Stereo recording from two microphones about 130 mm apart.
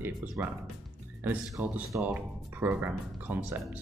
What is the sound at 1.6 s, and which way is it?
Speech, 15° right (ahead or behind).